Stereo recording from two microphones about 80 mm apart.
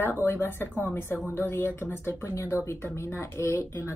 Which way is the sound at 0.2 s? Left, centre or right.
Left.